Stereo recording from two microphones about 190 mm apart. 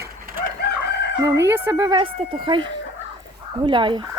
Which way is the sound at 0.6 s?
55° left (ahead or behind).